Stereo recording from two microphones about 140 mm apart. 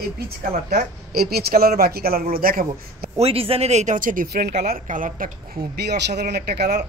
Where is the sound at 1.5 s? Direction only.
90° right.